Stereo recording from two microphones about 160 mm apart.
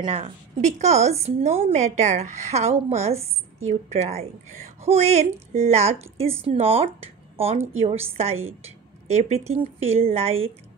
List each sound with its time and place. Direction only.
0.0 s a woman's voice: 40° right (ahead or behind)